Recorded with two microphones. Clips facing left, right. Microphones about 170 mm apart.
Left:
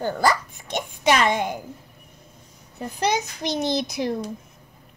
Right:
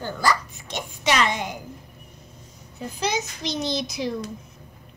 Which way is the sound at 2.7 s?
60° left (ahead or behind).